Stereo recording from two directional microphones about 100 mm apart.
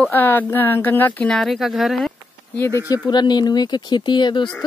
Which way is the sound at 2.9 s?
45° left (ahead or behind).